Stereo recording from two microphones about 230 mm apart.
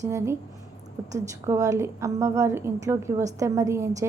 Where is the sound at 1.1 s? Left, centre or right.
Centre.